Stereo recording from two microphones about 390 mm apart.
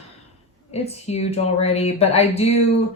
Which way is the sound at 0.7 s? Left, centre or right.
Centre.